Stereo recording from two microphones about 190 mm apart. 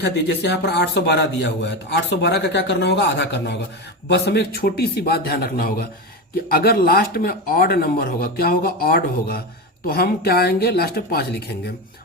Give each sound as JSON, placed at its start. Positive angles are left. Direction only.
{"t": 0.0, "sound": "a man's voice", "side_deg": 60}